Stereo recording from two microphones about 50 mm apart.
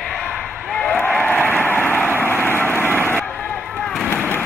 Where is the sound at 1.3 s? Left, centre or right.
Left.